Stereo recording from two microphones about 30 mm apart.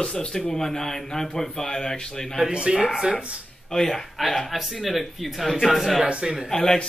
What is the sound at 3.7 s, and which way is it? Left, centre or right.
Speech, centre.